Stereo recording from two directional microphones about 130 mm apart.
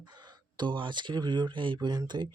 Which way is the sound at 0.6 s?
40° right (ahead or behind).